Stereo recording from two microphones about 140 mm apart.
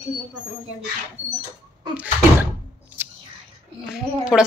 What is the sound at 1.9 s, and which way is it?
Door, 10° right (ahead or behind).